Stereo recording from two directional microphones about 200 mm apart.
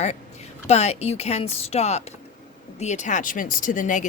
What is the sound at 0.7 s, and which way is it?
Speech, 35° left (ahead or behind).